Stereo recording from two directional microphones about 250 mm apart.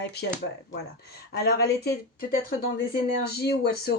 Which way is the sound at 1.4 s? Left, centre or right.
Left.